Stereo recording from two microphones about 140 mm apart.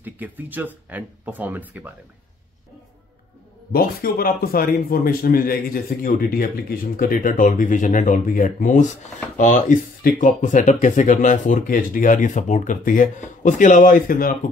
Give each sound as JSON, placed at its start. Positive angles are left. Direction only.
{"t": 0.0, "sound": "speech", "side_deg": -15}
{"t": 3.7, "sound": "a man's voice", "side_deg": 90}